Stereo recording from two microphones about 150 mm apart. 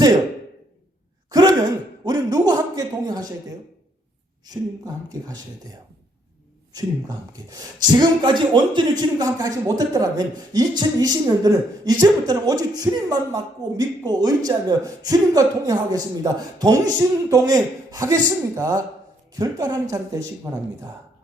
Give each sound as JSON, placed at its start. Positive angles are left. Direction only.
{"t": 1.3, "sound": "gasp", "side_deg": -25}
{"t": 2.0, "sound": "speech", "side_deg": -25}
{"t": 5.0, "sound": "speech", "side_deg": -25}
{"t": 7.5, "sound": "speech", "side_deg": -30}